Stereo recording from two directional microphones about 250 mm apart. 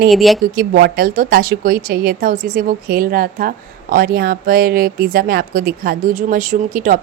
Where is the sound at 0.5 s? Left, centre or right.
Right.